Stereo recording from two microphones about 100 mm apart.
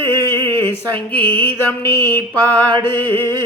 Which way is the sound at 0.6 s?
15° left (ahead or behind).